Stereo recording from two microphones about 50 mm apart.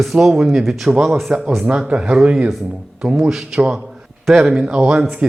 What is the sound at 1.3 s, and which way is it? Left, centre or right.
Speech, centre.